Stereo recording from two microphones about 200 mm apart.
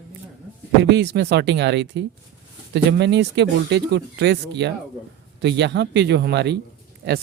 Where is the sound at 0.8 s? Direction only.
60° right (ahead or behind).